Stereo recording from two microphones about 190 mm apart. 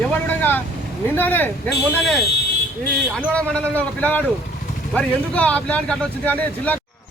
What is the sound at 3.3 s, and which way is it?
Speech, 5° left (ahead or behind).